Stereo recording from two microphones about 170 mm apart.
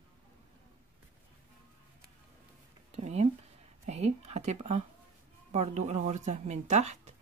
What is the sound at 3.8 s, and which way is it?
Speech, 40° right (ahead or behind).